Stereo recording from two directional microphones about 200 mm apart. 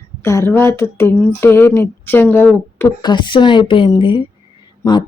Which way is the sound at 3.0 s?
20° left (ahead or behind).